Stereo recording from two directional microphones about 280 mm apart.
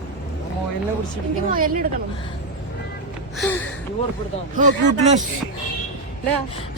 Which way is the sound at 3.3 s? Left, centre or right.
Centre.